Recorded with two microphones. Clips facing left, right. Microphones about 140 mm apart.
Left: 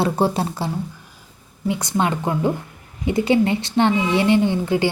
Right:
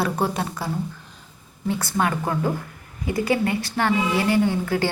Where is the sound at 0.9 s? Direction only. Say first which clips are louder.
Even; 10° left (ahead or behind).